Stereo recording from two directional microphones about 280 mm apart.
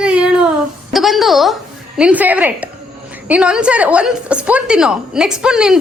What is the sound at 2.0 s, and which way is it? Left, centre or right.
A woman's voice, centre.